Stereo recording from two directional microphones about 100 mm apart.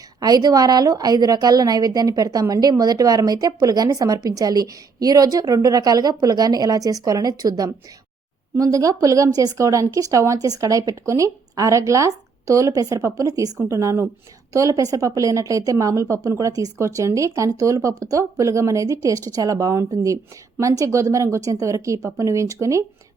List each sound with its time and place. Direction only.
0.2 s a woman's voice: 40° right (ahead or behind)